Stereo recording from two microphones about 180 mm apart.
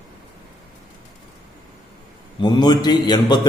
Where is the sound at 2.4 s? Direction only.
25° left (ahead or behind).